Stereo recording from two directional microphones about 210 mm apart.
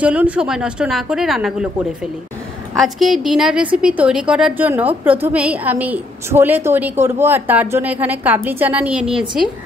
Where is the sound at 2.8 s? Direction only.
Centre (ahead or behind).